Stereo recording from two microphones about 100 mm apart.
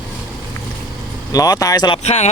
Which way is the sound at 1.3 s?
40° left (ahead or behind).